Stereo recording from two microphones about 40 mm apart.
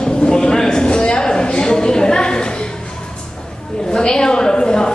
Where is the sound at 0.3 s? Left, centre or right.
Centre.